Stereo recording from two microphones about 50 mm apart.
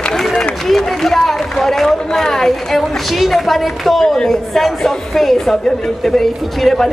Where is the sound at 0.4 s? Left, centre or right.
Centre.